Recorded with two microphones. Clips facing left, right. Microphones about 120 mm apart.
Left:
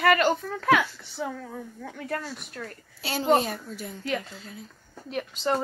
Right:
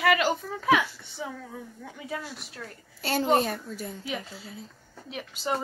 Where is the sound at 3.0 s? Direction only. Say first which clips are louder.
Left 1 dB; 50° right (ahead or behind).